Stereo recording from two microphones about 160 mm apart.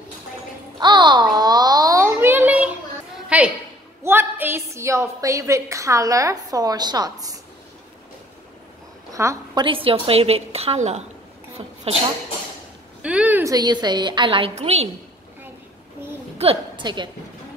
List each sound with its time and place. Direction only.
0.7 s a sound: 30° right (ahead or behind); by 3.5 s 10° right (ahead or behind)
4.0 s a woman's voice: 15° right (ahead or behind)
9.1 s a woman's voice: 20° right (ahead or behind)
9.7 s a woman's voice: 35° right (ahead or behind)
13.0 s a woman's voice: 10° right (ahead or behind)
13.5 s a woman's voice: 25° right (ahead or behind)
14.5 s a woman's voice: 40° right (ahead or behind)
16.3 s a woman's voice: 35° right (ahead or behind)